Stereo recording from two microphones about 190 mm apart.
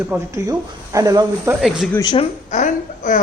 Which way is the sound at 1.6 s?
Centre (ahead or behind).